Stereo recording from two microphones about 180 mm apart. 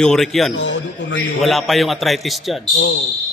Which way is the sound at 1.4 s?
Centre (ahead or behind).